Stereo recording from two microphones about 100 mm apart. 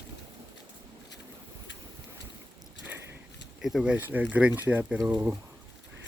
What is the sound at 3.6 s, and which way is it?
Speech, 5° right (ahead or behind).